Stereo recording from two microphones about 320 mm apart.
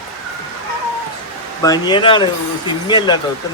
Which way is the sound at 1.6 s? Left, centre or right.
Centre.